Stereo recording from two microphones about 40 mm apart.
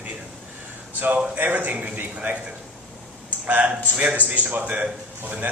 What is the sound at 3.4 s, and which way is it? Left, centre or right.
A man's voice, right.